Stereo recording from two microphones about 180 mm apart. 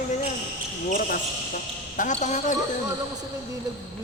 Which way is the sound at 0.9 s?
50° left (ahead or behind).